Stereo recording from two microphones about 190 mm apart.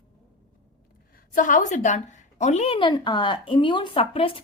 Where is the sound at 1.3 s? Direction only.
45° left (ahead or behind).